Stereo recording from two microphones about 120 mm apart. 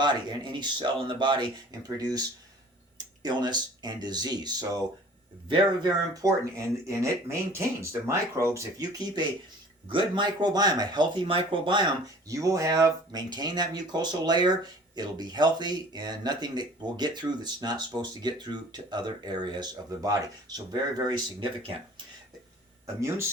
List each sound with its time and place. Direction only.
0.0 s speech: 40° right (ahead or behind)
3.2 s speech: 40° right (ahead or behind)
21.6 s speech: 50° right (ahead or behind)
23.0 s speech: 25° right (ahead or behind)